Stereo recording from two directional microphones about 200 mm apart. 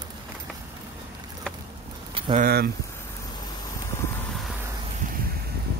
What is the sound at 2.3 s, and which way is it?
Speech, 50° right (ahead or behind).